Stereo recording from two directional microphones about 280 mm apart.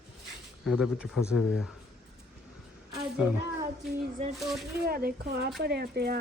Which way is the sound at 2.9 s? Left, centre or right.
Centre.